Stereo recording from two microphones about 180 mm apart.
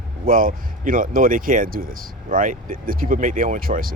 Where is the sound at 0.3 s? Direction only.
50° right (ahead or behind).